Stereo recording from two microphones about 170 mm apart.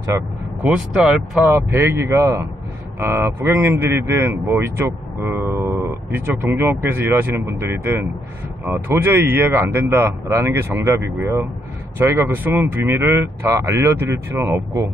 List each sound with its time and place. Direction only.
0.1 s speech: 15° right (ahead or behind)
0.7 s speech: 5° right (ahead or behind)